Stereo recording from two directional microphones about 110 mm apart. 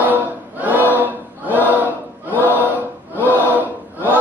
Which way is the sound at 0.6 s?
15° right (ahead or behind).